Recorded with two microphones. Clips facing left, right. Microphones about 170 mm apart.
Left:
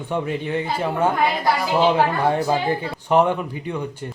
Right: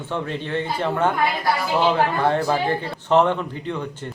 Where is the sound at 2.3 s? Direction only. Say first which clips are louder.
Even; 10° left (ahead or behind).